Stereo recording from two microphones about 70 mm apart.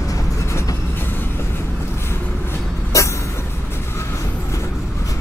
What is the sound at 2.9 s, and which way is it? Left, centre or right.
Vehicle, left.